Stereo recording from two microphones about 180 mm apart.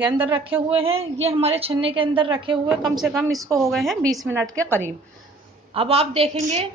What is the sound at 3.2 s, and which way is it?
Speech, 20° right (ahead or behind).